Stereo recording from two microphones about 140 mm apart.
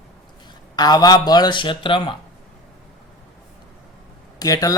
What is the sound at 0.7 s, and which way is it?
Speech, 30° left (ahead or behind).